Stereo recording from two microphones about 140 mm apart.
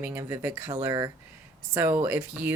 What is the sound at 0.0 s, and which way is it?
Speech, 15° right (ahead or behind).